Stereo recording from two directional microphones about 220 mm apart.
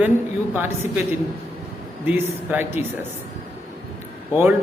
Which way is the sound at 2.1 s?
10° right (ahead or behind).